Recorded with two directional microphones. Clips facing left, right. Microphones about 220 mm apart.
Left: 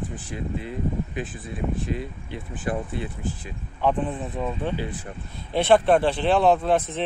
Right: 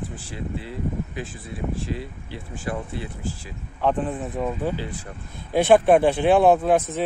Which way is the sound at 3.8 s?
5° right (ahead or behind).